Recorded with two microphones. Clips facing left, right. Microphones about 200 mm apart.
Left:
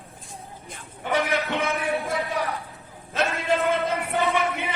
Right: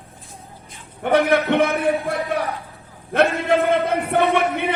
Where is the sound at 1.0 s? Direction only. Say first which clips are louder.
Right 8 dB; 60° right (ahead or behind).